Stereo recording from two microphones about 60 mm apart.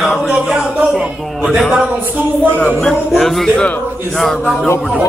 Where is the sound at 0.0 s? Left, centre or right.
Centre.